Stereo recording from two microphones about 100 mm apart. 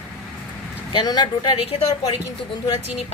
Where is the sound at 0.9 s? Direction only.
45° left (ahead or behind).